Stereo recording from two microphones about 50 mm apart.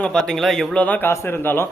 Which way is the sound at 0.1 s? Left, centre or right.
Centre.